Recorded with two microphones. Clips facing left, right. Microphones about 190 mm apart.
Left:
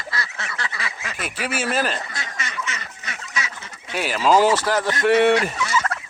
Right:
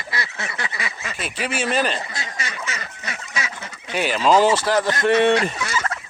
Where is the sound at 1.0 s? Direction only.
10° left (ahead or behind).